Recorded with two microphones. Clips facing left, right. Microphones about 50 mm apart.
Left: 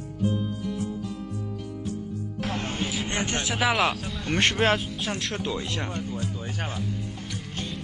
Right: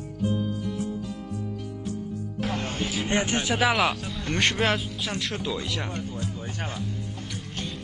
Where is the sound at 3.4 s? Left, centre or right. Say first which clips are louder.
Left 1 dB; centre.